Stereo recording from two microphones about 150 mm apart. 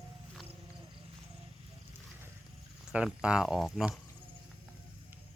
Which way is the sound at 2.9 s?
5° right (ahead or behind).